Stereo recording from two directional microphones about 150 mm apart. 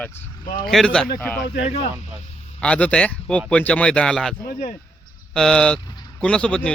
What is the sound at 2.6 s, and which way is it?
Speech, 10° left (ahead or behind).